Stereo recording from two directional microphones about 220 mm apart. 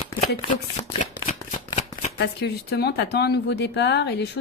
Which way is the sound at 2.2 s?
50° left (ahead or behind).